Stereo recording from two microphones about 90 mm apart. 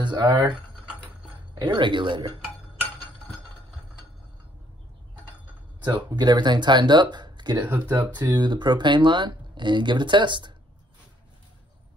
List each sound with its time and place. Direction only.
0.0 s speech: 55° right (ahead or behind)
0.5 s tick-tock: 15° right (ahead or behind)
1.5 s speech: 60° right (ahead or behind)
5.8 s a sound: 55° right (ahead or behind)
6.0 s speech: 50° right (ahead or behind)